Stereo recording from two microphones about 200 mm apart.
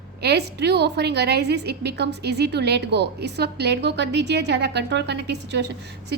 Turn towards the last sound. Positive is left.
turn(degrees=-55)  # may be behind; listen again after turning